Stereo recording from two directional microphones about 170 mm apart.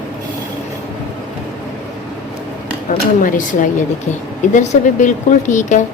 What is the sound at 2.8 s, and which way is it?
A woman's voice, 50° left (ahead or behind).